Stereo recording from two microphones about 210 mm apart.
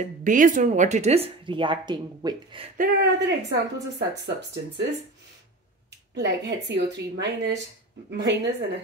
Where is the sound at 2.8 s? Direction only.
50° right (ahead or behind).